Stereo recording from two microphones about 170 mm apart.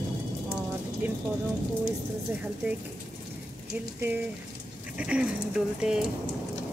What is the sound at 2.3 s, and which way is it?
Speech, 10° right (ahead or behind).